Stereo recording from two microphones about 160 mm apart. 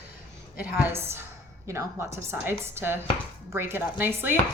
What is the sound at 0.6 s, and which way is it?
Speech, 15° right (ahead or behind).